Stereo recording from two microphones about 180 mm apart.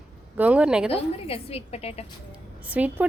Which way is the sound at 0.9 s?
30° left (ahead or behind).